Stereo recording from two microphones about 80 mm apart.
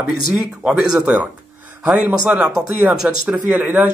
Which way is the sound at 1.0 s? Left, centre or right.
Centre.